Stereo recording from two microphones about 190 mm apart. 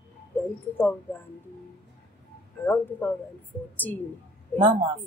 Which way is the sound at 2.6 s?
10° left (ahead or behind).